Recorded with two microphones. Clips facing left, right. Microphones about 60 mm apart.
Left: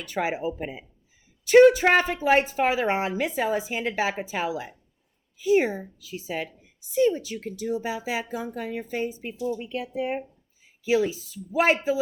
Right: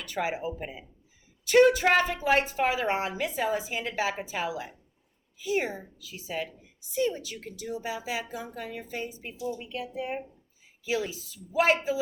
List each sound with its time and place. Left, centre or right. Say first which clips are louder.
0.0 s a woman's voice: left 3 dB; left